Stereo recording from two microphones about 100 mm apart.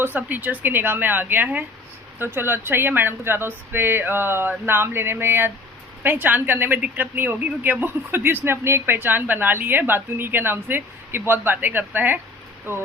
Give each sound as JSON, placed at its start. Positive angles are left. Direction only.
{"t": 0.0, "sound": "speech", "side_deg": -20}